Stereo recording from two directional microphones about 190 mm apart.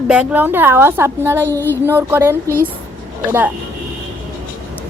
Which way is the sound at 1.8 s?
10° right (ahead or behind).